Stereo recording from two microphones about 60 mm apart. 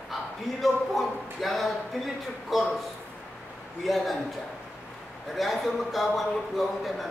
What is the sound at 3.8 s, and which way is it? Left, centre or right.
Speech, centre.